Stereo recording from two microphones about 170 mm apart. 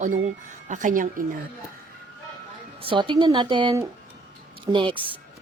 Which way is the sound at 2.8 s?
30° right (ahead or behind).